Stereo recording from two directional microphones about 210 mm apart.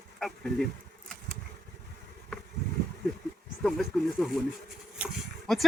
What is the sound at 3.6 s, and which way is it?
Speech, centre (ahead or behind).